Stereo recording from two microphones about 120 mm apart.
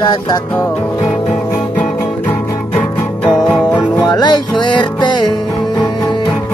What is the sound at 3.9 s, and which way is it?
Music, 35° left (ahead or behind).